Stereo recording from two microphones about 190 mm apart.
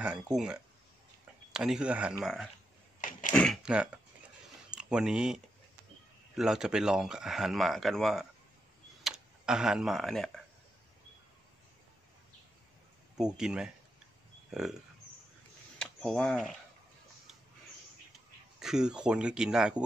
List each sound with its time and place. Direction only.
1.5 s speech: 5° right (ahead or behind)
3.0 s a sound: 45° left (ahead or behind)
3.3 s speech: centre (ahead or behind)
13.4 s speech: 5° right (ahead or behind)
15.8 s speech: 5° left (ahead or behind)
18.6 s speech: 5° right (ahead or behind)